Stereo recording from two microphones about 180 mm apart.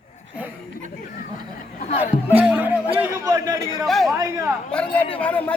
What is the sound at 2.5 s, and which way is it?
Music, 10° right (ahead or behind).